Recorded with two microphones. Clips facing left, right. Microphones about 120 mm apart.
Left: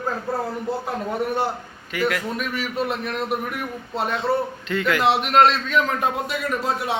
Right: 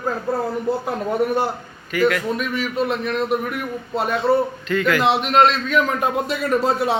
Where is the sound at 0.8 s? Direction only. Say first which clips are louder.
Right 4 dB; 10° right (ahead or behind).